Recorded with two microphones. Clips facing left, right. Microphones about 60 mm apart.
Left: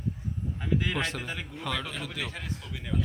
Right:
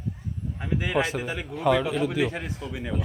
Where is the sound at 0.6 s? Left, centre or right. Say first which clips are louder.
Right 4 dB; centre.